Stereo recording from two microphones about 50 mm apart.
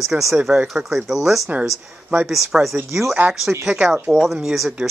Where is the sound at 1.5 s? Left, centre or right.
Right.